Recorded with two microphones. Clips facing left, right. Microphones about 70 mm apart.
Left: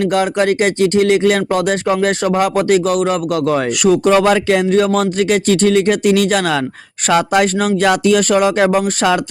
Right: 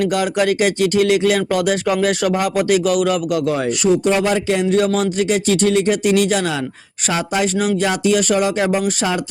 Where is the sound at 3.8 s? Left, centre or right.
Left.